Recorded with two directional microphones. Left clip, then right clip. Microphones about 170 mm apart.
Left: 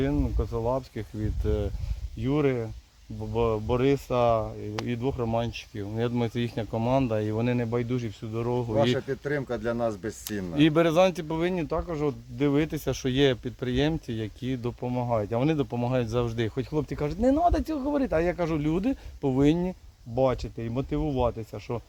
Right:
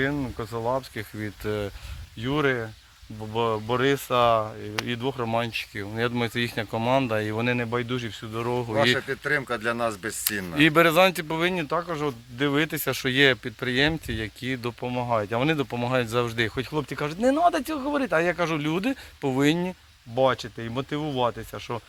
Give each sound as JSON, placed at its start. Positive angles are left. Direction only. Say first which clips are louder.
{"t": 0.0, "sound": "speech", "louder": "right 1 dB", "side_deg": -15}
{"t": 0.5, "sound": "speech", "louder": "right 2 dB", "side_deg": -30}
{"t": 0.9, "sound": "speech", "louder": "right 2 dB", "side_deg": -15}
{"t": 9.0, "sound": "speech", "louder": "right 4 dB", "side_deg": 10}
{"t": 10.5, "sound": "speech", "louder": "right 3 dB", "side_deg": -15}